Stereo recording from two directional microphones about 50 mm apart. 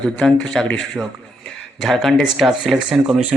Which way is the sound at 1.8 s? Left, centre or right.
Centre.